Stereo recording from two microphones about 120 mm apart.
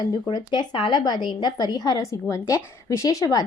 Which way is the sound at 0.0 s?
35° left (ahead or behind).